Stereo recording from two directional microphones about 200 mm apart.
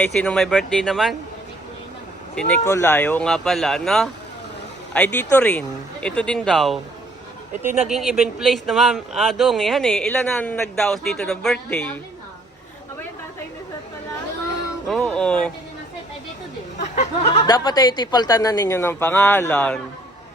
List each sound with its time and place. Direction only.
0.0 s speech: 5° left (ahead or behind)
2.3 s speech: 5° left (ahead or behind)
7.6 s speech: 10° right (ahead or behind)
7.9 s speech: centre (ahead or behind)
14.8 s speech: 5° left (ahead or behind)
16.8 s a sound: 35° left (ahead or behind)
17.4 s a woman's voice: 20° left (ahead or behind)